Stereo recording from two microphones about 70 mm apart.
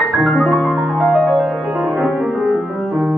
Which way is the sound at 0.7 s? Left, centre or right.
Centre.